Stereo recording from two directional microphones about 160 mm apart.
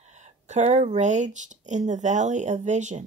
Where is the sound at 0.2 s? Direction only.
45° right (ahead or behind).